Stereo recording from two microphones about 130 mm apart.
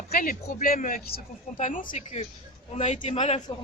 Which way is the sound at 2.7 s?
60° left (ahead or behind).